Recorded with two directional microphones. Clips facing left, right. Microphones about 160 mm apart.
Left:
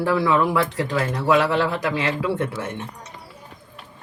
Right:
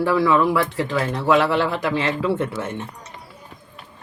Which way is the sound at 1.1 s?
25° right (ahead or behind).